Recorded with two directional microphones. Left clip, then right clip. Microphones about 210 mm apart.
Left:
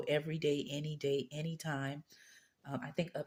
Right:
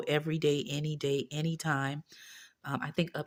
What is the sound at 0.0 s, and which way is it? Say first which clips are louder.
Speech: right 5 dB; 35° right (ahead or behind).